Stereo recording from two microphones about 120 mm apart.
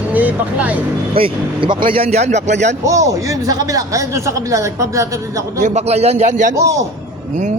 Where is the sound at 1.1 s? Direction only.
45° right (ahead or behind); by 2.7 s 80° right.